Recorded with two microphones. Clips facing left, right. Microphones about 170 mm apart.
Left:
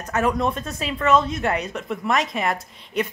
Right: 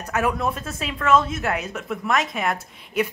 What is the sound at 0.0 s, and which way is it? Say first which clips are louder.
A woman's voice: left 2 dB; 10° right (ahead or behind).